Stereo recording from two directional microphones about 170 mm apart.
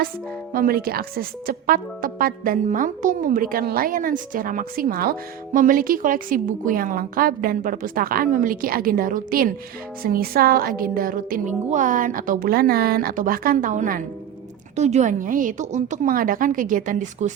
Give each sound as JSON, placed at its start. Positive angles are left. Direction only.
{"t": 0.5, "sound": "speech", "side_deg": -60}